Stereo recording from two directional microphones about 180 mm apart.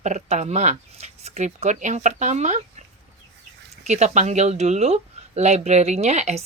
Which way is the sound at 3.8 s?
40° right (ahead or behind).